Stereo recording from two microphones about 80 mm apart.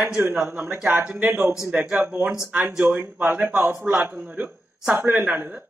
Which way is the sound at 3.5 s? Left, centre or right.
Centre.